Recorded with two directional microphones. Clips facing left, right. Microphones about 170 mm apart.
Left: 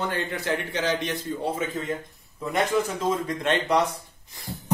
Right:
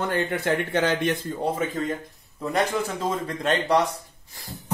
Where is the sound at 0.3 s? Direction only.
55° right (ahead or behind).